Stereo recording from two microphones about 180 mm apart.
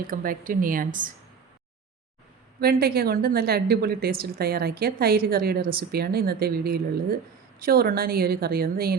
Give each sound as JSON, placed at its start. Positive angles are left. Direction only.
{"t": 0.1, "sound": "speech", "side_deg": -50}
{"t": 2.6, "sound": "a woman's voice", "side_deg": -60}